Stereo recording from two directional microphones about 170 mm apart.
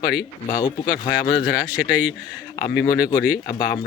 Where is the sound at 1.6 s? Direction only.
5° right (ahead or behind).